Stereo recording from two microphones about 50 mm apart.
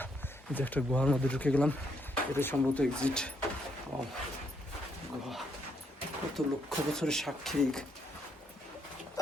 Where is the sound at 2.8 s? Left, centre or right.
Centre.